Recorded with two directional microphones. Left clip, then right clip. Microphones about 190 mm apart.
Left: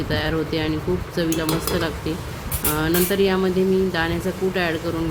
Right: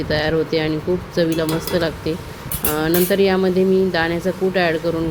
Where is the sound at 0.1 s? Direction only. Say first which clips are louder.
Right 6 dB; 15° right (ahead or behind).